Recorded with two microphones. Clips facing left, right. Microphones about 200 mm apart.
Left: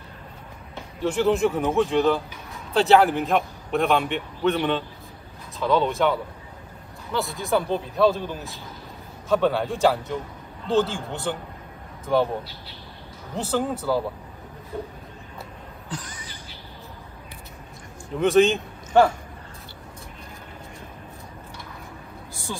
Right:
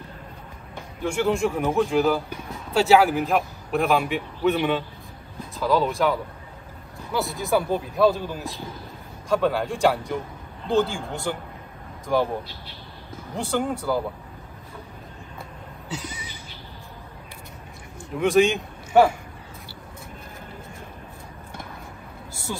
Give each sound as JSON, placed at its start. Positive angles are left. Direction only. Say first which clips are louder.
{"t": 1.0, "sound": "a man's voice", "louder": "left 2 dB", "side_deg": 0}
{"t": 13.4, "sound": "a man's voice", "louder": "even", "side_deg": 0}
{"t": 15.9, "sound": "a sound", "louder": "right 2 dB", "side_deg": -10}
{"t": 18.2, "sound": "a man's voice", "louder": "left 1 dB", "side_deg": 0}